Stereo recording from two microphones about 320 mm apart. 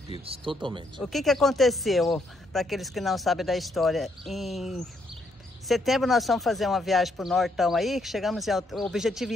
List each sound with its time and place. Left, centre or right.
0.2 s speech: centre
1.0 s speech: centre